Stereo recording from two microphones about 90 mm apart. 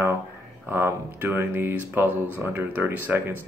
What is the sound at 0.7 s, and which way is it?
Speech, 25° right (ahead or behind).